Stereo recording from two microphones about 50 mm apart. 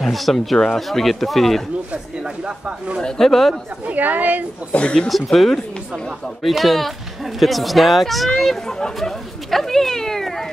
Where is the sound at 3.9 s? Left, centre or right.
Right.